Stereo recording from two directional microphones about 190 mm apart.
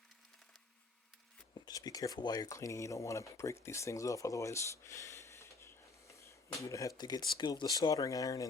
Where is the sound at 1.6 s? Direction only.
20° left (ahead or behind).